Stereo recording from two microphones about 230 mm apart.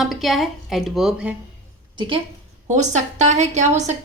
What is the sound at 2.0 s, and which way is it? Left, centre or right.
A woman's voice, right.